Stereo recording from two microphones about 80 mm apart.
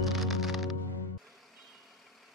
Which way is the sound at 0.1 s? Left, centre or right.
Centre.